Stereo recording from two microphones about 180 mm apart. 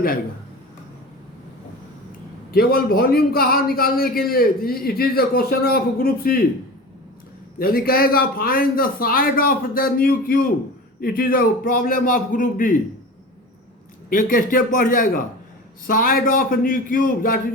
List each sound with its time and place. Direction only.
2.5 s a man's voice: 55° left (ahead or behind)
7.6 s a man's voice: 55° left (ahead or behind)
14.1 s a man's voice: 50° left (ahead or behind)